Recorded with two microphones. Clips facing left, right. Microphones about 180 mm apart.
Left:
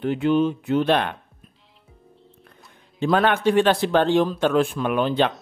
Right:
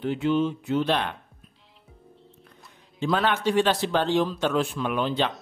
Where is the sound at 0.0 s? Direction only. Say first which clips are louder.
Left 4 dB; 55° left (ahead or behind).